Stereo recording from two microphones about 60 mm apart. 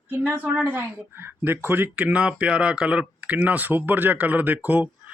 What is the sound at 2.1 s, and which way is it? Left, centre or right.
Speech, right.